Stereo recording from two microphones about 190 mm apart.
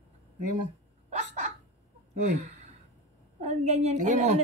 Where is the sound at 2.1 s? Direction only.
40° right (ahead or behind).